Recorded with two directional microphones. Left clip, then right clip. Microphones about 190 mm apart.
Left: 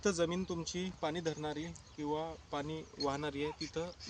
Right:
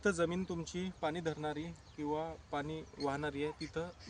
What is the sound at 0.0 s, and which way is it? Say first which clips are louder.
Speech: even; 10° right (ahead or behind).